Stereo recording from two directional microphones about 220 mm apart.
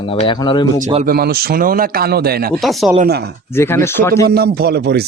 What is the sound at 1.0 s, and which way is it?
A man's voice, 40° right (ahead or behind).